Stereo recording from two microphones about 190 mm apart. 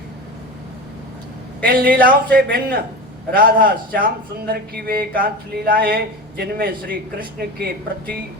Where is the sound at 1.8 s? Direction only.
50° right (ahead or behind).